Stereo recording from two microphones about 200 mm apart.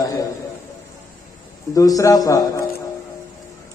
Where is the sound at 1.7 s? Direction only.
15° left (ahead or behind).